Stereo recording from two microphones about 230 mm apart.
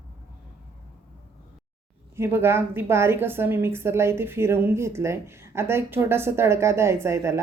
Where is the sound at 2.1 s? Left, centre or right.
Centre.